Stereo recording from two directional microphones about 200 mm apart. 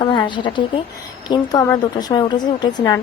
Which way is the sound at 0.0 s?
25° left (ahead or behind).